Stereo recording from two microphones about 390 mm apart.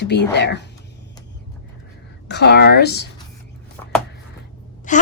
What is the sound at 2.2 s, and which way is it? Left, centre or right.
Speech, left.